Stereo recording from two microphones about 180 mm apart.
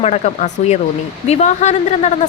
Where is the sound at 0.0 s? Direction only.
40° left (ahead or behind).